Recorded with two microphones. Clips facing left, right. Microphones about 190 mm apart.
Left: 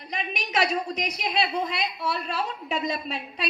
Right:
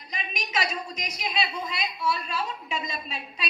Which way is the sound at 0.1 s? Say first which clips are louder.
Left 3 dB; 60° left (ahead or behind).